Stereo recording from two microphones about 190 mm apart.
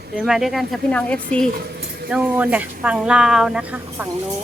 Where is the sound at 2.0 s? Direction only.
5° right (ahead or behind).